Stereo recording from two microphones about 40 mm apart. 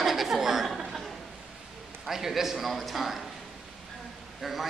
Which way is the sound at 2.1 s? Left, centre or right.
Centre.